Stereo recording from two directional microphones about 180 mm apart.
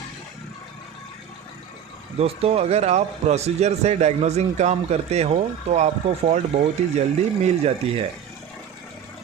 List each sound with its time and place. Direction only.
2.1 s speech: 35° right (ahead or behind)